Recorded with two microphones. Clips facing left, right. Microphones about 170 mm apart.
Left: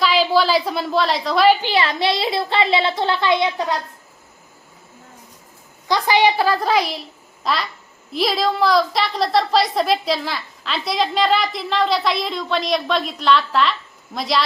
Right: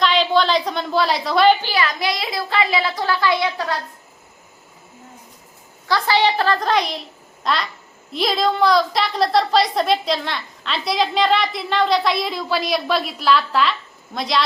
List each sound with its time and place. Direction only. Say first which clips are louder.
0.0 s a woman's voice: even; 5° left (ahead or behind)
1.6 s speech: left 3 dB; 25° left (ahead or behind)
5.9 s a woman's voice: left 1 dB; 15° left (ahead or behind)
7.4 s a sound: even; centre (ahead or behind)
8.1 s a woman's voice: even; centre (ahead or behind)